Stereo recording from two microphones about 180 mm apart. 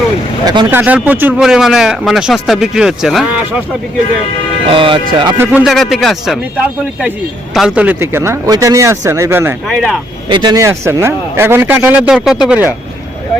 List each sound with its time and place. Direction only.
0.4 s speech: 25° right (ahead or behind)
0.7 s speech: 5° right (ahead or behind)
4.7 s speech: 30° right (ahead or behind)
5.4 s speech: 10° right (ahead or behind)
7.5 s speech: 5° right (ahead or behind)
9.6 s speech: centre (ahead or behind)
10.2 s speech: 25° right (ahead or behind); by 12.7 s 10° right (ahead or behind)